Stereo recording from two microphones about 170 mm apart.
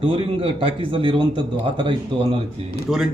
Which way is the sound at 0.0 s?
30° right (ahead or behind).